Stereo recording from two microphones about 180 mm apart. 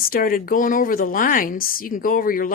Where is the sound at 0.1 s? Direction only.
50° left (ahead or behind).